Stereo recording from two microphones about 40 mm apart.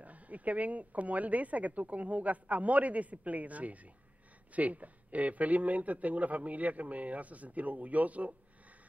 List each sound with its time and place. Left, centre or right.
0.0 s speech: right